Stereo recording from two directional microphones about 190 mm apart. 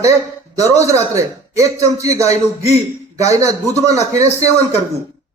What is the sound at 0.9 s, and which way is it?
A man's voice, 15° right (ahead or behind).